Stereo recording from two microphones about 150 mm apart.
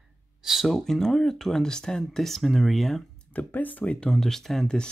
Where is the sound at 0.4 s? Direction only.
Centre (ahead or behind).